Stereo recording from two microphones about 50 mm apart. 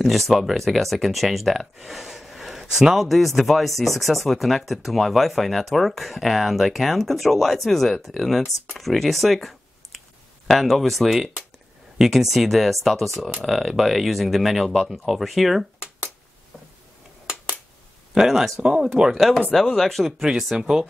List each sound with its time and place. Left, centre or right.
0.0 s speech: centre
18.1 s speech: centre
18.6 s speech: centre
19.5 s speech: centre
20.0 s speech: centre